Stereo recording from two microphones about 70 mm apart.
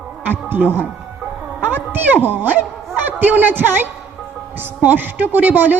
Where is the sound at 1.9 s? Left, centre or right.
Right.